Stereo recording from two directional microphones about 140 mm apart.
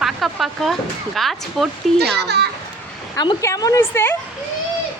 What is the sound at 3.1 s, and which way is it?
A woman's voice, 30° left (ahead or behind).